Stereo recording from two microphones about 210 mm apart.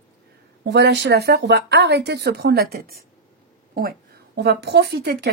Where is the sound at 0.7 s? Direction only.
55° right (ahead or behind).